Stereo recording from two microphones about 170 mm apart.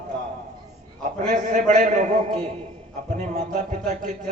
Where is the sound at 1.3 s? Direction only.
45° right (ahead or behind).